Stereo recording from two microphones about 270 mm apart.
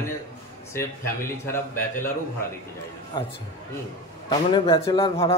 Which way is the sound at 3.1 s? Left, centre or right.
Centre.